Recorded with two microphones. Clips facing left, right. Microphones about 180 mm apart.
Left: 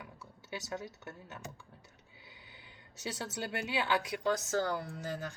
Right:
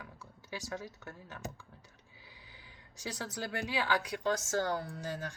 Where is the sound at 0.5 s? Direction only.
20° left (ahead or behind).